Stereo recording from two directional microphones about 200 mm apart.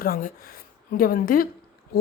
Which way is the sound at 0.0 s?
45° left (ahead or behind).